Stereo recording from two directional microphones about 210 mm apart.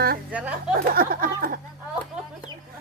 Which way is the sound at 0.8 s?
45° right (ahead or behind).